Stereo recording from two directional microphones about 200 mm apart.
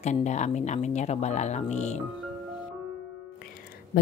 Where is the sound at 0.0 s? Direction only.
35° left (ahead or behind).